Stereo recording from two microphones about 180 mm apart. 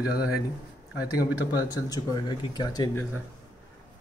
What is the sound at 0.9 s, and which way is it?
Speech, 10° right (ahead or behind).